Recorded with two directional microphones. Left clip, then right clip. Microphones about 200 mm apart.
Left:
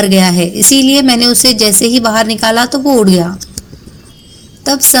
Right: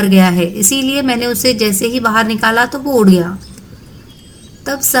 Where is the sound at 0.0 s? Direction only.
20° left (ahead or behind).